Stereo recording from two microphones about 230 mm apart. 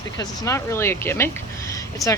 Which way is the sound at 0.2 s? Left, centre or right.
Centre.